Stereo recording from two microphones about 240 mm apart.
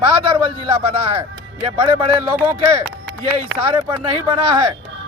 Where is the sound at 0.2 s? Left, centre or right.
Right.